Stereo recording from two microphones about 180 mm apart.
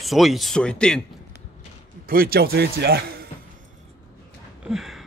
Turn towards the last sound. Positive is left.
turn(degrees=0)  # may be behind; listen again after turning